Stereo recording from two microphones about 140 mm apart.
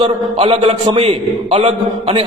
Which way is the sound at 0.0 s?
45° right (ahead or behind).